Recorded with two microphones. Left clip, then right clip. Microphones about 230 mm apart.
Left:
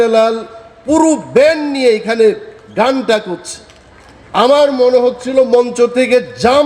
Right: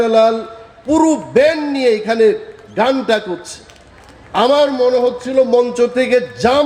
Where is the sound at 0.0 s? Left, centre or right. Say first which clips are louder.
Left 1 dB; left.